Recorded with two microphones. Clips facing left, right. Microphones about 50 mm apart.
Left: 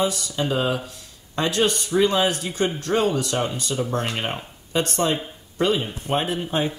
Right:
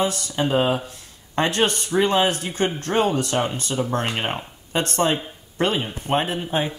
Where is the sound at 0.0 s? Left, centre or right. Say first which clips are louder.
Right 1 dB; right.